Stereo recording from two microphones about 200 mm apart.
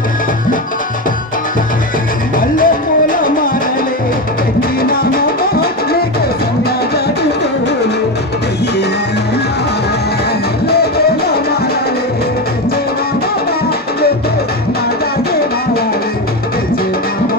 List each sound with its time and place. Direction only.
2.5 s music: 45° left (ahead or behind)
4.6 s music: 50° left (ahead or behind)
10.7 s music: 50° left (ahead or behind)